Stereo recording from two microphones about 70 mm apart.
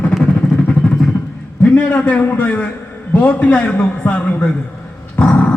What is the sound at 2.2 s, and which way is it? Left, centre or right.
A man's voice, left.